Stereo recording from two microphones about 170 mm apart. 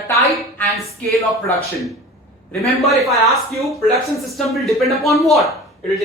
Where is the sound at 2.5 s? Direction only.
Centre (ahead or behind).